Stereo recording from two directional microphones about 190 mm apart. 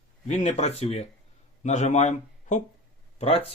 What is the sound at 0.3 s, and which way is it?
Speech, 40° left (ahead or behind).